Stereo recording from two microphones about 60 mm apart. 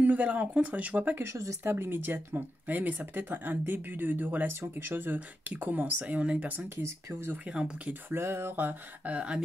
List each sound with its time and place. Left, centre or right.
0.0 s speech: right
1.2 s speech: right
1.6 s speech: right
6.8 s speech: right
7.4 s speech: centre
8.1 s speech: right; by 9.4 s centre